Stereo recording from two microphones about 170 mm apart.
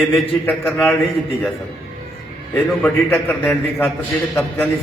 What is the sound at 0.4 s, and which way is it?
Speech, 10° left (ahead or behind).